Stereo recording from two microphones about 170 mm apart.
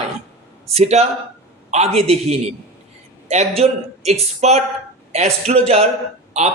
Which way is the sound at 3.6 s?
40° right (ahead or behind).